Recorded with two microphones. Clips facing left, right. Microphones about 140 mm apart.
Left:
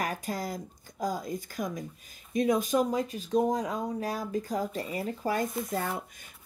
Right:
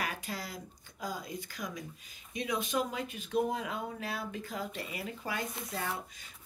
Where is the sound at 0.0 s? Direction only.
45° left (ahead or behind).